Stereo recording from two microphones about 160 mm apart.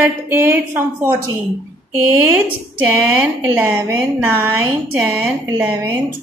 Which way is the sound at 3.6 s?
15° right (ahead or behind).